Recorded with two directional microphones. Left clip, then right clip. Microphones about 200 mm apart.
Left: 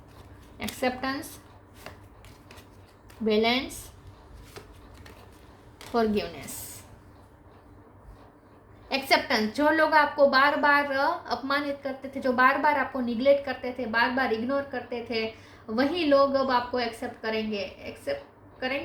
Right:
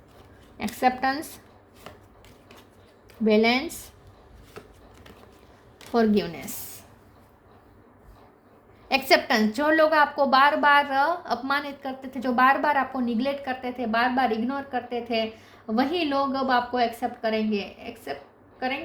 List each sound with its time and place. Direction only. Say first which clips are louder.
0.5 s a woman's voice: right 6 dB; 45° right (ahead or behind)
3.2 s a woman's voice: right 3 dB; 45° right (ahead or behind)
5.9 s a woman's voice: right 3 dB; 45° right (ahead or behind)
8.9 s a woman's voice: right 4 dB; 55° right (ahead or behind)